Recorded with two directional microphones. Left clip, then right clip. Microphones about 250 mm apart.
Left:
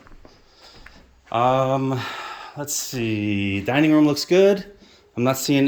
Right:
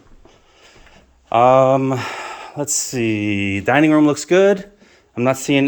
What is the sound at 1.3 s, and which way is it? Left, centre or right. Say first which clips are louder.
Speech: right 7 dB; centre.